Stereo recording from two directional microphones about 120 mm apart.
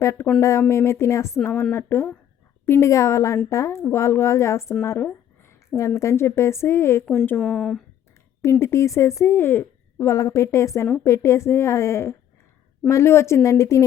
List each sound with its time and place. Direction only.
0.0 s a woman's voice: 25° left (ahead or behind)
7.3 s speech: 5° left (ahead or behind)
8.4 s a woman's voice: 20° left (ahead or behind)